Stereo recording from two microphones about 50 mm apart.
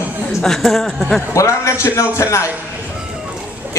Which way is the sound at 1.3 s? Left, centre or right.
Left.